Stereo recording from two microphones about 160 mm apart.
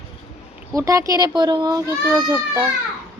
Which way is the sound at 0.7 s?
20° right (ahead or behind).